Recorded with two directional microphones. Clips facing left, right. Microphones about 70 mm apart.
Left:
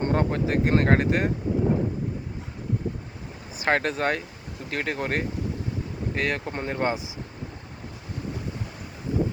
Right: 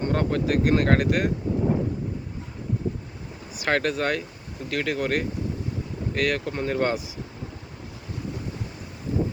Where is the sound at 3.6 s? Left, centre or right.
Left.